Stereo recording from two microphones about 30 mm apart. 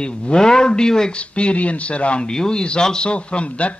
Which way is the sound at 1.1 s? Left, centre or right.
Left.